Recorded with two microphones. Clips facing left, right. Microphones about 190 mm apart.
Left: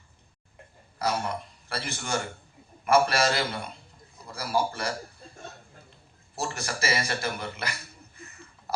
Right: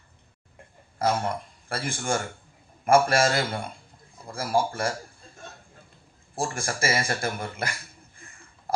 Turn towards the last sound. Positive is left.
turn(degrees=-50)  # may be behind; listen again after turning